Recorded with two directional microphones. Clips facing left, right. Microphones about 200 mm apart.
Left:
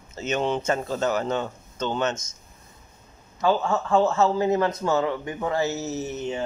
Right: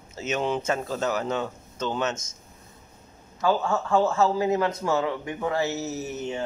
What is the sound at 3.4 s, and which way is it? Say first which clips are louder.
Speech: left 1 dB; 20° left (ahead or behind).